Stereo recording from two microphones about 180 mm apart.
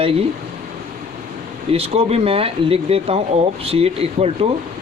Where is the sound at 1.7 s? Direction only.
35° right (ahead or behind).